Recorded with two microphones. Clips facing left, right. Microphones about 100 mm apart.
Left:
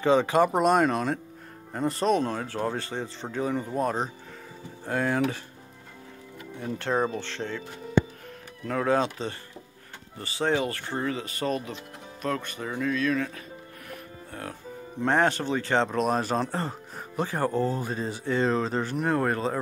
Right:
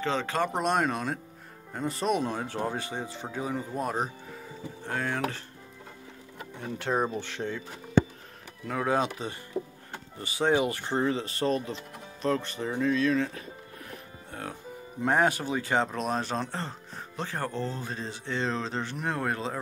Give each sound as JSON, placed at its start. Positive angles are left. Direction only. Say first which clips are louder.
{"t": 0.0, "sound": "speech", "louder": "left 7 dB", "side_deg": 15}
{"t": 4.8, "sound": "speech", "louder": "left 5 dB", "side_deg": 5}
{"t": 6.8, "sound": "speech", "louder": "left 1 dB", "side_deg": -5}
{"t": 8.6, "sound": "speech", "louder": "left 3 dB", "side_deg": -10}
{"t": 15.0, "sound": "speech", "louder": "left 1 dB", "side_deg": -10}